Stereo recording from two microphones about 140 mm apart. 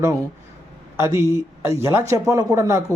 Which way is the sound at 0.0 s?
25° right (ahead or behind).